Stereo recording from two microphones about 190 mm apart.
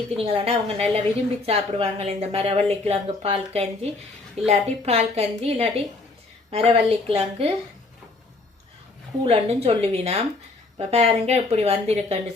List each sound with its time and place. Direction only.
0.2 s a woman's voice: 30° right (ahead or behind)
9.2 s a woman's voice: 35° right (ahead or behind)